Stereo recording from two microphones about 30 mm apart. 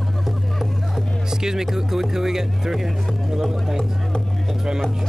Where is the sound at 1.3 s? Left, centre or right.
Centre.